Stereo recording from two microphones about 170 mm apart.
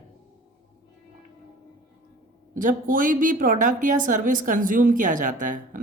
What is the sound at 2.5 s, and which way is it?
A woman's voice, 50° right (ahead or behind).